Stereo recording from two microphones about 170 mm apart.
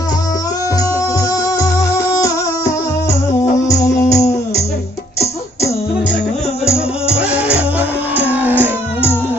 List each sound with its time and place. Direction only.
1.5 s music: 20° left (ahead or behind)
3.7 s music: 40° left (ahead or behind)
7.1 s music: 10° right (ahead or behind)